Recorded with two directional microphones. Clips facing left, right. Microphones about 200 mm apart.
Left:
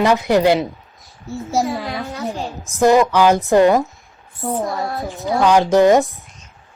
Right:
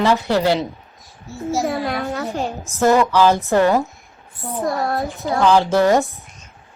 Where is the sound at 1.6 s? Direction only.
60° right (ahead or behind).